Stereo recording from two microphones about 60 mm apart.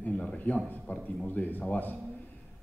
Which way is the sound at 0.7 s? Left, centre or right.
Left.